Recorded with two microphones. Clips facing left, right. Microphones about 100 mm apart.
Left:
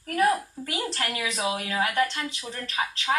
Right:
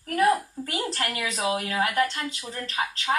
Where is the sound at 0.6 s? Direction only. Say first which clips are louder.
Right 1 dB; 35° right (ahead or behind).